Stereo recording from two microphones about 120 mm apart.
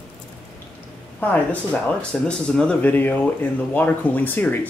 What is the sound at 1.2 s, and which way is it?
Speech, 10° left (ahead or behind).